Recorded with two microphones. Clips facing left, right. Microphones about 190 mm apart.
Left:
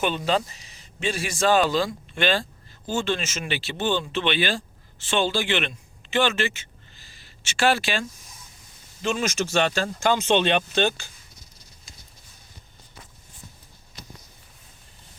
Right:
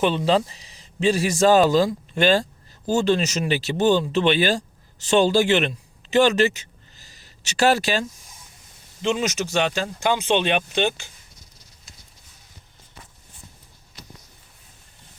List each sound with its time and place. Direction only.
0.0 s a man's voice: 30° right (ahead or behind)
9.0 s speech: 20° right (ahead or behind)